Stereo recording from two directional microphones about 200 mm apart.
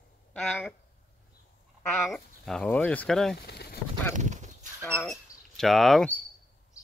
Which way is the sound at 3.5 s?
55° left (ahead or behind).